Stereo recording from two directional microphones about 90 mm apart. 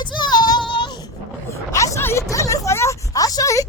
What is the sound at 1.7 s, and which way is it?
A woman's voice, 35° left (ahead or behind).